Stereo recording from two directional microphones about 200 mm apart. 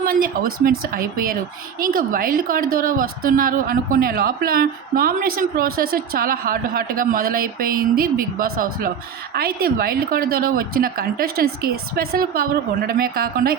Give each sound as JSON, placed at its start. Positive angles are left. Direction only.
{"t": 0.0, "sound": "a woman's voice", "side_deg": -45}